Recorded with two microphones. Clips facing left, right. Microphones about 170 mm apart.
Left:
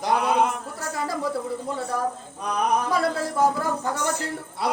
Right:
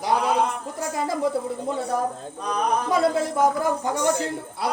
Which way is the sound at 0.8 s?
20° right (ahead or behind).